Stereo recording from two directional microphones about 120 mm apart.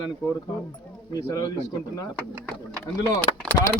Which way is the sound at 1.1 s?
35° left (ahead or behind).